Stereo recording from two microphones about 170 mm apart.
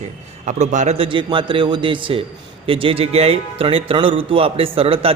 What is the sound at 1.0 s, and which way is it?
A man's voice, 30° right (ahead or behind).